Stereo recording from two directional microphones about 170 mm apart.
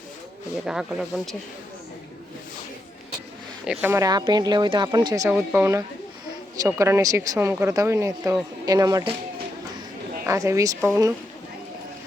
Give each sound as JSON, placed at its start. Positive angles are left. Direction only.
{"t": 0.6, "sound": "speech", "side_deg": -5}
{"t": 3.7, "sound": "speech", "side_deg": -5}
{"t": 3.9, "sound": "speech", "side_deg": -20}
{"t": 5.3, "sound": "speech", "side_deg": -10}
{"t": 10.2, "sound": "speech", "side_deg": -20}